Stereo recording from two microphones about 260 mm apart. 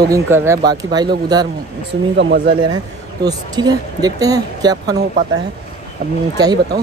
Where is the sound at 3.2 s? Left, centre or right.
Centre.